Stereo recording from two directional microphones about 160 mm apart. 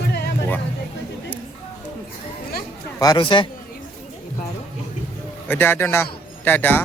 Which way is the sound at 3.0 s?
25° left (ahead or behind).